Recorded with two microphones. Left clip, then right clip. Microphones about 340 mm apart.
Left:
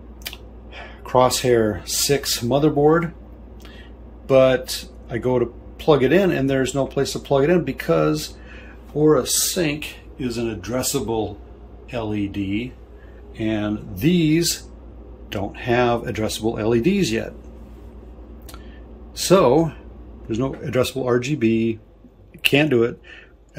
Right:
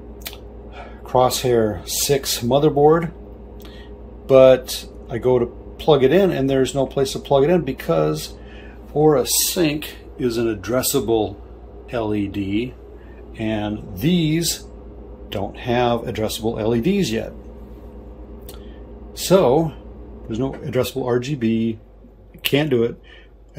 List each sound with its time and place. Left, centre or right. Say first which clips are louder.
0.7 s speech: even; centre
4.3 s speech: right 4 dB; centre
19.1 s speech: even; centre